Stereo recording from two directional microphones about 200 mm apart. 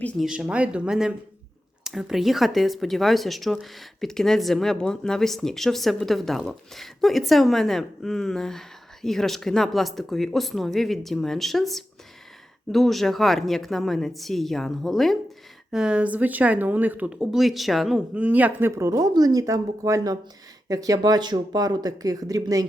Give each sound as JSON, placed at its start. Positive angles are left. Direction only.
{"t": 0.0, "sound": "speech", "side_deg": 5}